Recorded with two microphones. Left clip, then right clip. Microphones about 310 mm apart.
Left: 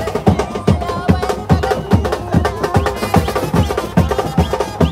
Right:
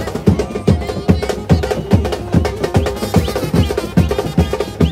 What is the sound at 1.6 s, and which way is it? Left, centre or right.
Music, centre.